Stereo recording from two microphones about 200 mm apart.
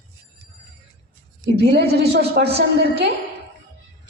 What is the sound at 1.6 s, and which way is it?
Speech, 55° right (ahead or behind).